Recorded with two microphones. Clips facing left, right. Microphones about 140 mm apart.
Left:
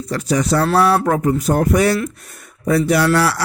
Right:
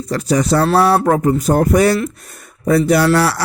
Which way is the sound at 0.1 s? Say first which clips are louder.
Right 2 dB; 35° right (ahead or behind).